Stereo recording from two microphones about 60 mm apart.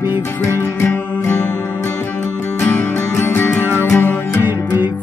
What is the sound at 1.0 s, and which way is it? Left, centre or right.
Music, left.